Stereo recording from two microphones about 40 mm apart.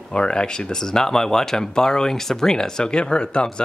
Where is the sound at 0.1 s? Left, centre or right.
Left.